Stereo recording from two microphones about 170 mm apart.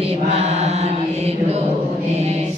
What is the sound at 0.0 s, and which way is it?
Mantra, 35° right (ahead or behind).